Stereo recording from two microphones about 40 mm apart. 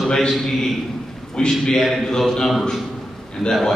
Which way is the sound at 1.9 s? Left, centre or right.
Centre.